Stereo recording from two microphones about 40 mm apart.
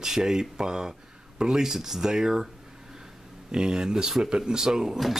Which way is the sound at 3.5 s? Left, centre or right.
Centre.